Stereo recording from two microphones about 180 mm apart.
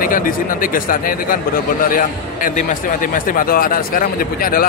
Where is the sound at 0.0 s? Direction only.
50° left (ahead or behind).